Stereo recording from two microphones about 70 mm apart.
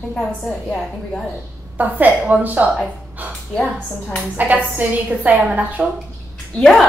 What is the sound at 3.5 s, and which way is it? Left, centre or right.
Speech, centre.